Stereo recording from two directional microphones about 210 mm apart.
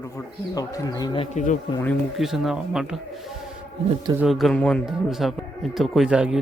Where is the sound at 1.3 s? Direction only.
35° left (ahead or behind).